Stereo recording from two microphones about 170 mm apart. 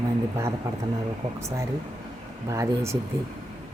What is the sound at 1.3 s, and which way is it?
Speech, 15° right (ahead or behind).